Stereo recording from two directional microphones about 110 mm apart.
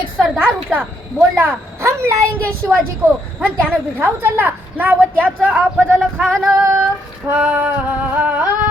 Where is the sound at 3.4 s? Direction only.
15° right (ahead or behind).